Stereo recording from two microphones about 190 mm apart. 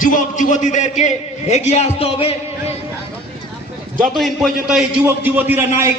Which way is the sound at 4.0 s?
Centre (ahead or behind).